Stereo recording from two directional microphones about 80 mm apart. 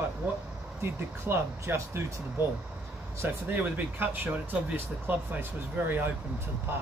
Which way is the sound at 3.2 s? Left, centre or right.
Right.